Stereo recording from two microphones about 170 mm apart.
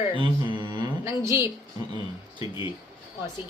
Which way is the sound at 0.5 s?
25° right (ahead or behind).